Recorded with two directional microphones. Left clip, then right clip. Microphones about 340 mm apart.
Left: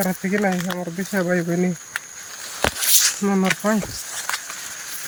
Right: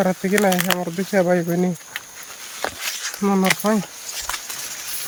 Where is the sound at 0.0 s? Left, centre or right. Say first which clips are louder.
Right 4 dB; centre.